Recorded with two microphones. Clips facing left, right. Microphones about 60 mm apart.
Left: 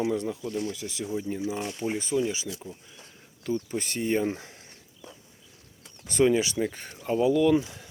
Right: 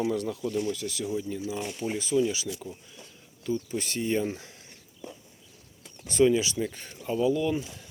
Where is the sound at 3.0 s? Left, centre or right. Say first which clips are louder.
Even; left.